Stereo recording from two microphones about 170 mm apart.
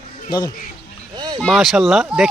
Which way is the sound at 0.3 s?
25° left (ahead or behind).